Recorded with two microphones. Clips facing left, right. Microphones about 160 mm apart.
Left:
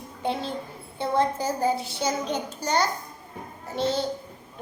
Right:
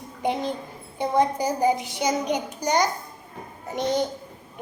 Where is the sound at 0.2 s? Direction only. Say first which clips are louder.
Right 3 dB; 15° right (ahead or behind).